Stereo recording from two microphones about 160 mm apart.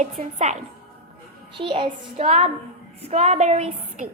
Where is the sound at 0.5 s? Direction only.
45° right (ahead or behind).